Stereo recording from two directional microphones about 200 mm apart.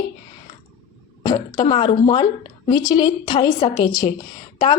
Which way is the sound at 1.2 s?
20° left (ahead or behind).